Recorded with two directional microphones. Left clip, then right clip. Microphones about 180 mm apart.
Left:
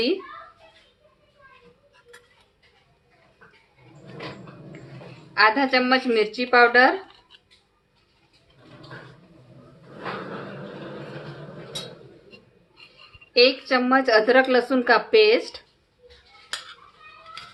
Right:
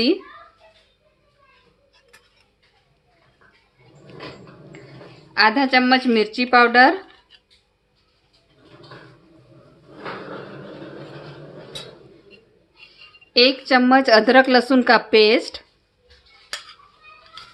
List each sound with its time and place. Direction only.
5.3 s a woman's voice: 45° right (ahead or behind)
13.3 s a woman's voice: 45° right (ahead or behind)